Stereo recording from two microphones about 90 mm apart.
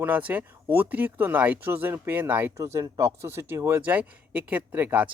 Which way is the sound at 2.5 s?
35° right (ahead or behind).